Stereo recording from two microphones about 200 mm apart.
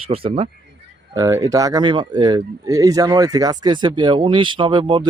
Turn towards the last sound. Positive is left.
turn(degrees=-25)  # may be behind; listen again after turning